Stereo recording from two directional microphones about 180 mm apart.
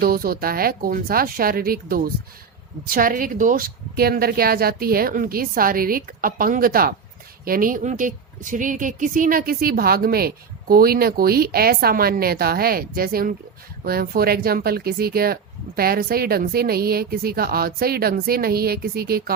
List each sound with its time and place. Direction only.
0.0 s a woman's voice: 55° right (ahead or behind)